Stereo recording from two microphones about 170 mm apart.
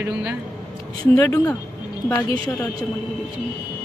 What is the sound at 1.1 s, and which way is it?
Speech, 10° left (ahead or behind).